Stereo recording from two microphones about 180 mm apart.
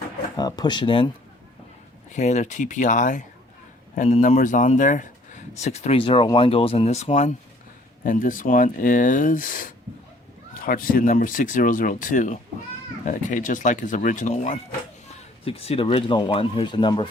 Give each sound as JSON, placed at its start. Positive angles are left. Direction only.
{"t": 0.3, "sound": "speech", "side_deg": 20}
{"t": 2.1, "sound": "speech", "side_deg": 40}